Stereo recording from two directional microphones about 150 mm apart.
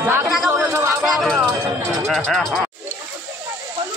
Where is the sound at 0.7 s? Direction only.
15° right (ahead or behind).